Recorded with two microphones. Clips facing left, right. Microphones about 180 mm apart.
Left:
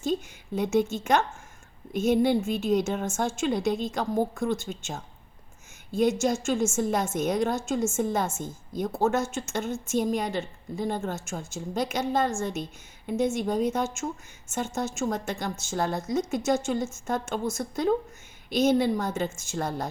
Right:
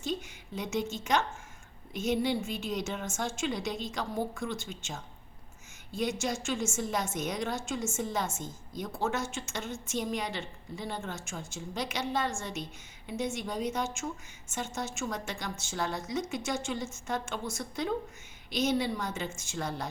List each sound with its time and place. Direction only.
0.0 s a woman's voice: 50° left (ahead or behind)